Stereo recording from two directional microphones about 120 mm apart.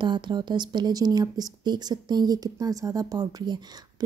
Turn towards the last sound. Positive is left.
turn(degrees=-35)  # may be behind; listen again after turning